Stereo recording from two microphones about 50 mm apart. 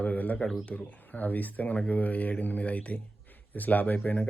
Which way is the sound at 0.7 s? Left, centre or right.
Left.